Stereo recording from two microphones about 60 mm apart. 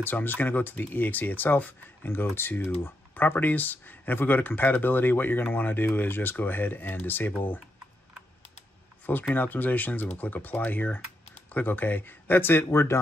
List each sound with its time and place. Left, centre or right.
0.0 s speech: left
9.3 s speech: left